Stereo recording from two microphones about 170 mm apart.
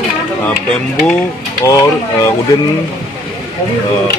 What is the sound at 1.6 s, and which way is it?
Mechanisms, 20° left (ahead or behind).